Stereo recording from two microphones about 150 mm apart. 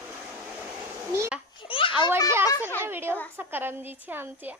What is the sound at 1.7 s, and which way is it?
Children playing, 35° left (ahead or behind).